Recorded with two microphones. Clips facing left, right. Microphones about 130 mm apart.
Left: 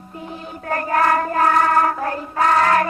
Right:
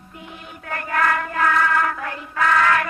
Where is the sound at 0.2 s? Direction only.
35° left (ahead or behind).